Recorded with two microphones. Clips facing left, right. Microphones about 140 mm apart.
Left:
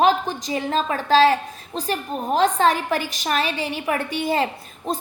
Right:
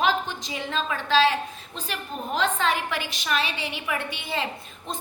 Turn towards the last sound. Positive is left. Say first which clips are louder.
# left 7 dB
turn(degrees=40)  # may be behind; listen again after turning